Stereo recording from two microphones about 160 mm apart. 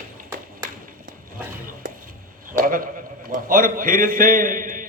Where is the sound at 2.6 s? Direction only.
60° right (ahead or behind).